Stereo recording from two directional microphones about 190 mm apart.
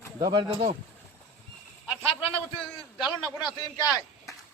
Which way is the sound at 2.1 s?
30° left (ahead or behind).